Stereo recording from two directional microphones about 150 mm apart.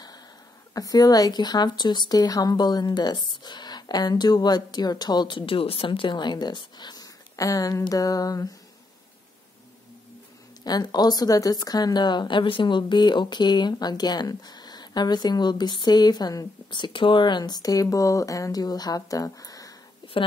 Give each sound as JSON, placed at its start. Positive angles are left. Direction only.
{"t": 0.7, "sound": "speech", "side_deg": 25}
{"t": 10.6, "sound": "speech", "side_deg": 25}